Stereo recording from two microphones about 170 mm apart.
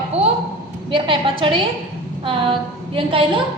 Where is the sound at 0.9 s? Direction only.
30° right (ahead or behind).